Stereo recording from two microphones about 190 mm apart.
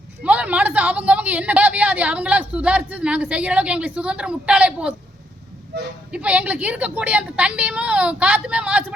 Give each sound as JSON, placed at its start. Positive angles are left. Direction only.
{"t": 0.2, "sound": "a woman's voice", "side_deg": -5}
{"t": 5.7, "sound": "speech", "side_deg": -60}
{"t": 6.1, "sound": "a woman's voice", "side_deg": -5}